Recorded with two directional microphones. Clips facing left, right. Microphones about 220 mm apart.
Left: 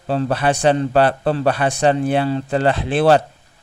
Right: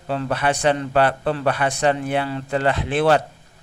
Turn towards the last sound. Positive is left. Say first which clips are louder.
# left 3 dB
turn(degrees=30)  # may be behind; listen again after turning